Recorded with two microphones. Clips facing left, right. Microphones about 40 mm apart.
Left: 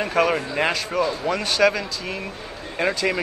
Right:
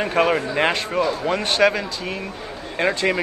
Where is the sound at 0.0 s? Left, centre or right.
Centre.